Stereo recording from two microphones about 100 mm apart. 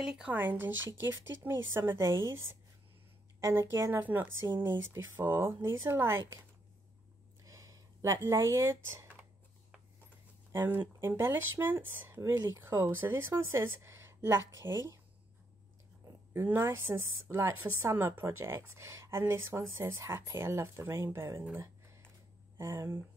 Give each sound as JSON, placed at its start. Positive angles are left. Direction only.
{"t": 0.0, "sound": "speech", "side_deg": -10}
{"t": 0.4, "sound": "a woman's voice", "side_deg": -20}
{"t": 7.4, "sound": "speech", "side_deg": -35}
{"t": 10.5, "sound": "a woman's voice", "side_deg": -20}
{"t": 16.3, "sound": "a woman's voice", "side_deg": -25}
{"t": 21.5, "sound": "a sound", "side_deg": -25}
{"t": 22.6, "sound": "a woman's voice", "side_deg": -30}